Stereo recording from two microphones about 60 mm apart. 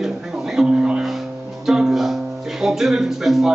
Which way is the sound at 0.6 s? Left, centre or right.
Centre.